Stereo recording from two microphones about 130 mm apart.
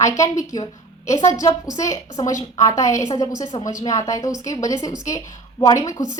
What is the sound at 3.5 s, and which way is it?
Speech, 40° left (ahead or behind).